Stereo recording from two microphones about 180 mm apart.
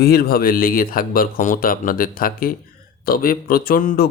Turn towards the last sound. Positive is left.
turn(degrees=50)  # may be behind; listen again after turning